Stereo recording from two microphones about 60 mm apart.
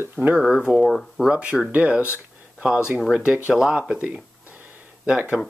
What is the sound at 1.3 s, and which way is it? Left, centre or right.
Speech, right.